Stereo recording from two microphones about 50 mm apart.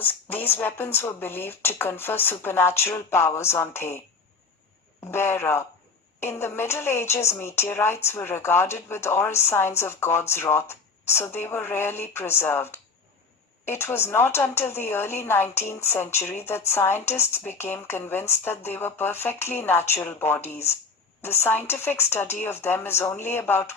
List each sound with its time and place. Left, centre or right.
0.0 s speech: left
5.0 s speech: left